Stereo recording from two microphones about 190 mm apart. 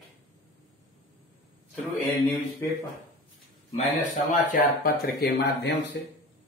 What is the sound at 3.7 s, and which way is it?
Speech, 40° left (ahead or behind).